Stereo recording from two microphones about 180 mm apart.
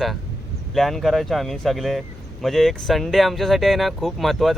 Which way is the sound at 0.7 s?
Centre (ahead or behind).